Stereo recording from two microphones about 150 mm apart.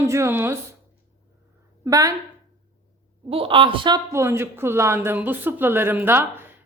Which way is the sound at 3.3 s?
40° right (ahead or behind).